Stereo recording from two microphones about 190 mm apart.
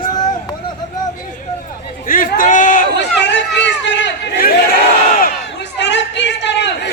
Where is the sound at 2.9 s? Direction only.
65° left (ahead or behind).